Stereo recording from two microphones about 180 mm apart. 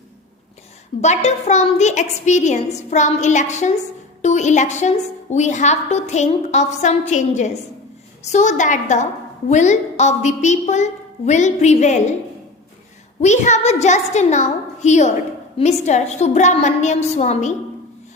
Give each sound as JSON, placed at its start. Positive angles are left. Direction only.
{"t": 1.0, "sound": "a woman's voice", "side_deg": 40}
{"t": 13.2, "sound": "a woman's voice", "side_deg": 40}